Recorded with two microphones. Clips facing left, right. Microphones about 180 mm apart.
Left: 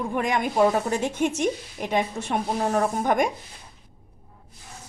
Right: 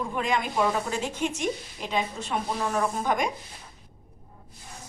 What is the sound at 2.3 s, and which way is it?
A woman's voice, 45° left (ahead or behind).